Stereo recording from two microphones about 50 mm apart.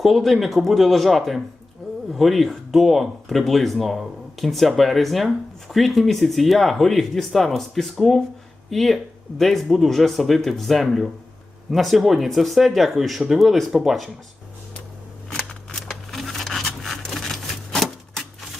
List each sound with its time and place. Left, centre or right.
0.0 s speech: centre
15.3 s scissors: centre
16.1 s a sound: centre